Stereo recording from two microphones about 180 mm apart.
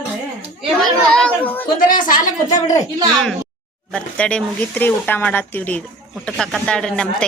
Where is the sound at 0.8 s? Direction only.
5° left (ahead or behind).